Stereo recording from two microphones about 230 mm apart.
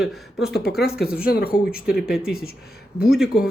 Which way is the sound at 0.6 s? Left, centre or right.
Left.